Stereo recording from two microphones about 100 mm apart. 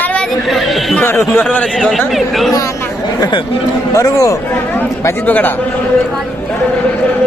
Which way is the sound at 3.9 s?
30° left (ahead or behind).